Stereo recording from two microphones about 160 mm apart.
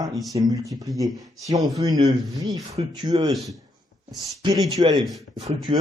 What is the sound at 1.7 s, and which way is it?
Speech, 20° right (ahead or behind).